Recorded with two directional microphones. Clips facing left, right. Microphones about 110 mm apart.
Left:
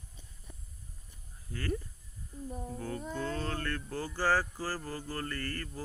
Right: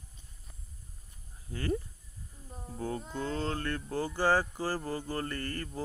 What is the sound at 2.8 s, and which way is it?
Speech, 25° right (ahead or behind).